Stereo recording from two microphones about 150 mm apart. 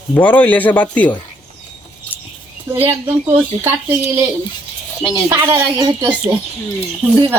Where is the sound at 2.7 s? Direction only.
15° right (ahead or behind).